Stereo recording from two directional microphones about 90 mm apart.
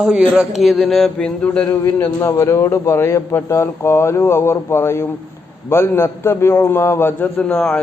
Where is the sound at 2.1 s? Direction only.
35° left (ahead or behind).